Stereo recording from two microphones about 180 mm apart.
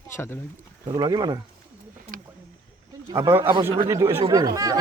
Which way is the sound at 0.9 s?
20° right (ahead or behind).